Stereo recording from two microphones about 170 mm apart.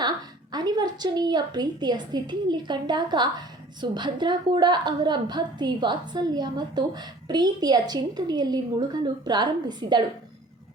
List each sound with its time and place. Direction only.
0.5 s a woman's voice: 25° right (ahead or behind)